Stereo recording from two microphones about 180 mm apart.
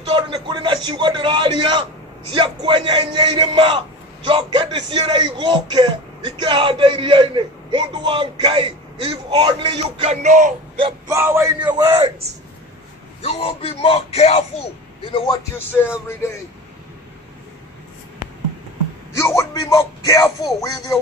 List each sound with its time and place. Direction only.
0.1 s speech: 25° right (ahead or behind); by 10.5 s 45° right (ahead or behind)
11.1 s speech: 15° right (ahead or behind)
13.2 s speech: 30° left (ahead or behind)
15.5 s music: 10° left (ahead or behind)
19.1 s a sound: 15° left (ahead or behind)
20.1 s speech: 20° left (ahead or behind)